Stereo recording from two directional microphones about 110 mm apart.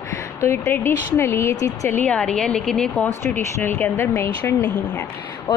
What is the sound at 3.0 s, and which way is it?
Speech, 20° left (ahead or behind).